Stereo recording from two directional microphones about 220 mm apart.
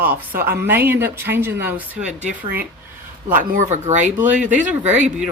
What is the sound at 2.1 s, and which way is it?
Speech, 40° right (ahead or behind).